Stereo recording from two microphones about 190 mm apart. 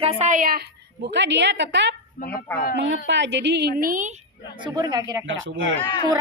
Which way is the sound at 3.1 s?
70° right (ahead or behind).